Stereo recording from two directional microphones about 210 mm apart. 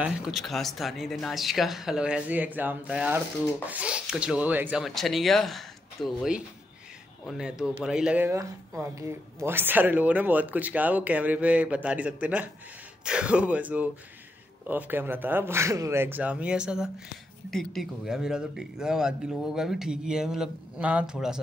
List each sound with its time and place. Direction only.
0.0 s speech: 5° right (ahead or behind)